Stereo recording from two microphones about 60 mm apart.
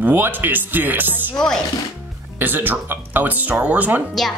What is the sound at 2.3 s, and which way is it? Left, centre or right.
Speech, right.